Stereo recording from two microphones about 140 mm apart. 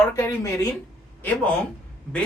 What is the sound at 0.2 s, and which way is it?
Speech, 20° left (ahead or behind).